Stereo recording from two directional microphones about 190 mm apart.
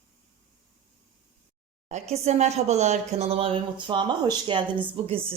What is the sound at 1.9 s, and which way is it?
Speech, 35° right (ahead or behind).